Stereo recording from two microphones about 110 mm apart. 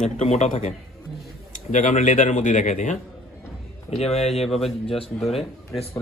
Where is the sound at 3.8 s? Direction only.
75° left (ahead or behind).